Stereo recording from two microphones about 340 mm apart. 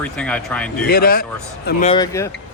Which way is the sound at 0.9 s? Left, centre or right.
Left.